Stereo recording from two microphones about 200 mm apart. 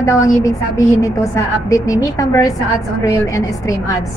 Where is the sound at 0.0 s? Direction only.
15° left (ahead or behind).